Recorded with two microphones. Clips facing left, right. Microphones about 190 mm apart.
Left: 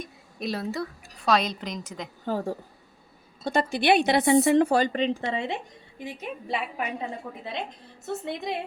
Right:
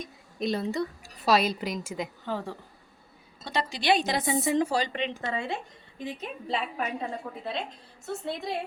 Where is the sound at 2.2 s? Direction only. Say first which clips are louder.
Left 5 dB; 45° left (ahead or behind); by 4.9 s 60° left (ahead or behind).